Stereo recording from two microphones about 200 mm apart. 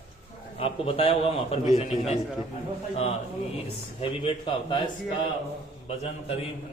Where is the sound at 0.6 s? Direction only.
30° left (ahead or behind).